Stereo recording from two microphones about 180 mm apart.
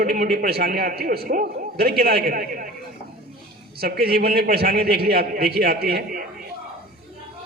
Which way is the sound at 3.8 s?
60° right (ahead or behind).